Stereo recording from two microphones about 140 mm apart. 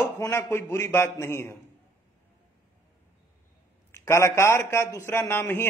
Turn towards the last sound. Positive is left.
turn(degrees=15)  # may be behind; listen again after turning